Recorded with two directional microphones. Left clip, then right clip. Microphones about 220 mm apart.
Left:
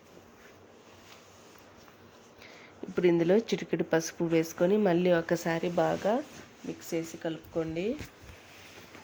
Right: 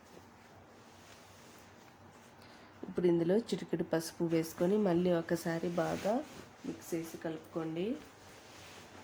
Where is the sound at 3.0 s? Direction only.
15° left (ahead or behind).